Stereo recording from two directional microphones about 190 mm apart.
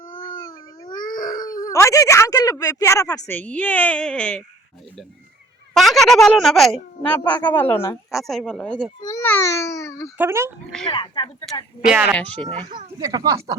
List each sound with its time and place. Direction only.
0.9 s dog: 45° left (ahead or behind)
1.7 s a woman's voice: 15° left (ahead or behind)
5.7 s a woman's voice: centre (ahead or behind)
8.1 s speech: centre (ahead or behind)
9.0 s babbling: 15° left (ahead or behind)
10.2 s speech: 15° right (ahead or behind)
10.8 s speech: 25° left (ahead or behind)
11.9 s speech: 5° right (ahead or behind)
12.1 s a woman's voice: 5° left (ahead or behind)
12.4 s a child's voice: 30° right (ahead or behind)
13.0 s speech: 20° right (ahead or behind)